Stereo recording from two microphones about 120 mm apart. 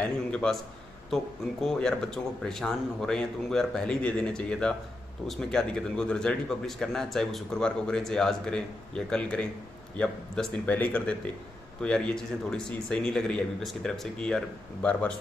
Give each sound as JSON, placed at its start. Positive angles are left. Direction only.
{"t": 0.0, "sound": "a man's voice", "side_deg": 5}